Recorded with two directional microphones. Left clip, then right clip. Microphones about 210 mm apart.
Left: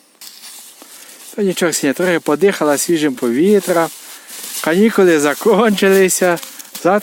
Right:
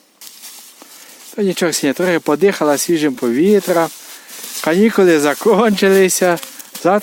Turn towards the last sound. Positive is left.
turn(degrees=0)  # may be behind; listen again after turning